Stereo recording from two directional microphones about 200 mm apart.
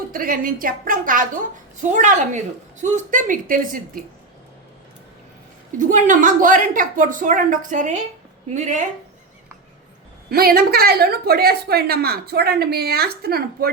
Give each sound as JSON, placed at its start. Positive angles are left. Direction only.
{"t": 0.1, "sound": "a woman's voice", "side_deg": -45}
{"t": 5.8, "sound": "a woman's voice", "side_deg": -40}
{"t": 10.2, "sound": "a woman's voice", "side_deg": -50}